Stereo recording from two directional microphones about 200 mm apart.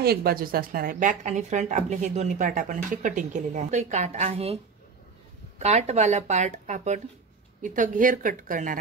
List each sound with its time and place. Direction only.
0.0 s speech: 50° right (ahead or behind); by 4.6 s 30° right (ahead or behind)
5.6 s speech: 35° right (ahead or behind)